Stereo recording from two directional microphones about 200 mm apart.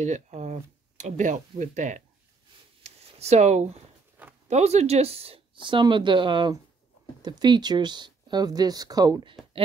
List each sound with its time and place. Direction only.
0.0 s speech: 35° right (ahead or behind)
2.8 s a sound: 35° right (ahead or behind)
4.5 s speech: 35° right (ahead or behind)